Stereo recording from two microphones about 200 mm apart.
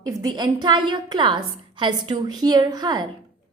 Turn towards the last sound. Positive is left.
turn(degrees=-20)  # may be behind; listen again after turning